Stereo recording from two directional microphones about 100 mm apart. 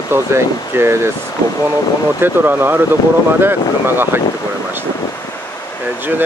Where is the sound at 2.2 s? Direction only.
20° right (ahead or behind).